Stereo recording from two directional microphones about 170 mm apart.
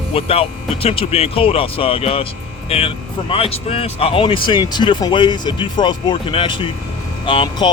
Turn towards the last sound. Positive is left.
turn(degrees=30)  # may be behind; listen again after turning